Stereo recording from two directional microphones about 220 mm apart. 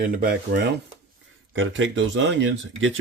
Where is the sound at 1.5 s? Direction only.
60° right (ahead or behind).